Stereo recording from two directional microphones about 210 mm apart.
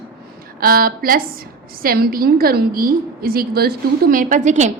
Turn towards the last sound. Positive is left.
turn(degrees=-35)  # may be behind; listen again after turning